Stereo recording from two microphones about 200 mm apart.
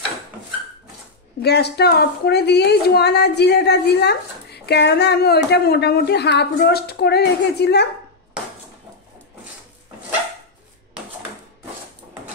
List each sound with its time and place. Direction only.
1.4 s a woman's voice: 55° left (ahead or behind)